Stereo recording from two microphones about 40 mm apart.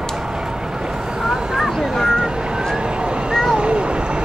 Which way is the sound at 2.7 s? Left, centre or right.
Right.